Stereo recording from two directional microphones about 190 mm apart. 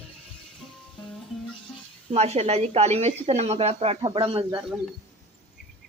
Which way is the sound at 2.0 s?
35° right (ahead or behind).